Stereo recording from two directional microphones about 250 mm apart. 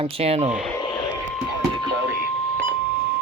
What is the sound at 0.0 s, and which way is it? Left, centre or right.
Speech, right.